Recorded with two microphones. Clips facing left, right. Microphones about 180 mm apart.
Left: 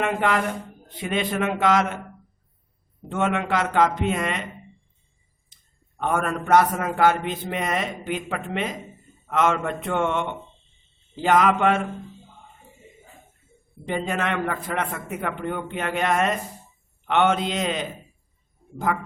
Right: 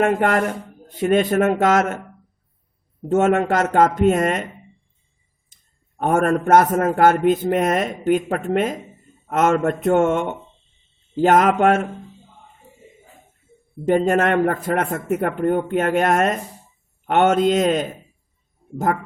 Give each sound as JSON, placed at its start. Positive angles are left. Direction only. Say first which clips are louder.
{"t": 0.0, "sound": "a man's voice", "louder": "right 5 dB", "side_deg": -50}
{"t": 3.1, "sound": "a man's voice", "louder": "right 7 dB", "side_deg": -45}
{"t": 6.0, "sound": "a man's voice", "louder": "right 7 dB", "side_deg": -45}
{"t": 13.8, "sound": "a man's voice", "louder": "right 9 dB", "side_deg": -45}
{"t": 18.9, "sound": "a man's voice", "louder": "right 4 dB", "side_deg": -50}